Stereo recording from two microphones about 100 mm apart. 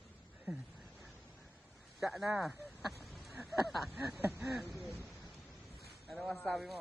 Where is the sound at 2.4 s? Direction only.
Centre (ahead or behind).